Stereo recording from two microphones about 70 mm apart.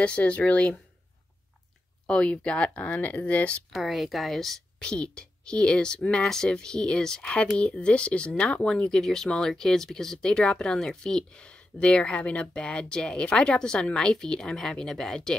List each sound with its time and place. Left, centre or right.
0.0 s speech: centre
2.0 s speech: centre
3.7 s speech: centre